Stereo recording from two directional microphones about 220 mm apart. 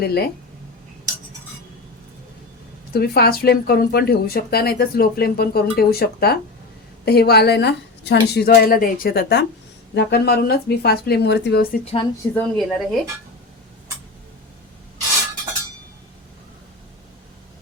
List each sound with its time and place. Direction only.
0.0 s speech: 45° left (ahead or behind)
2.9 s speech: 45° left (ahead or behind)
12.3 s speech: 5° left (ahead or behind)